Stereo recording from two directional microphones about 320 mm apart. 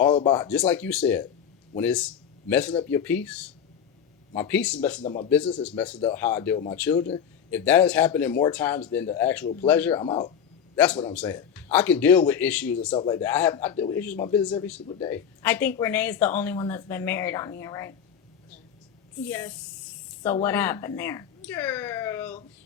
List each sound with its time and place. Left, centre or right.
0.1 s speech: centre
5.0 s speech: centre
5.3 s speech: centre
6.9 s speech: centre
7.5 s speech: centre
10.8 s speech: centre
19.3 s speech: centre